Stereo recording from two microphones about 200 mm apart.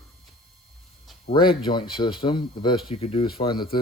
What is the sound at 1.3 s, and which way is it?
Speech, 25° left (ahead or behind).